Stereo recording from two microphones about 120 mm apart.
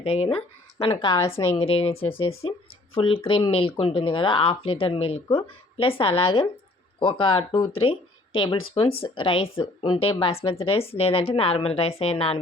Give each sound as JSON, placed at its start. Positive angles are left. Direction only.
{"t": 0.0, "sound": "a woman's voice", "side_deg": 55}